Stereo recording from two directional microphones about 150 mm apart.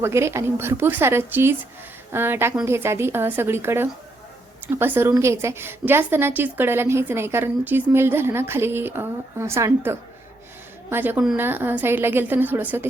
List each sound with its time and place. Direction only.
0.0 s a woman's voice: 20° right (ahead or behind)